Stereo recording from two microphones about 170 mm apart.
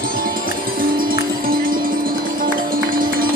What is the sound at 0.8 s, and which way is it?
Music, 55° right (ahead or behind).